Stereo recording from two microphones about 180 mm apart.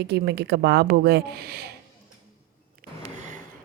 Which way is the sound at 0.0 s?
70° right (ahead or behind).